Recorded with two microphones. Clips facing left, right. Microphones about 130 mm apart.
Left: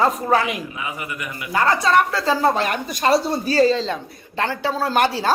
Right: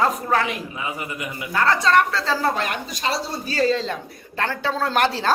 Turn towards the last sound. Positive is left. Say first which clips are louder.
# left 1 dB
turn(degrees=10)  # may be behind; listen again after turning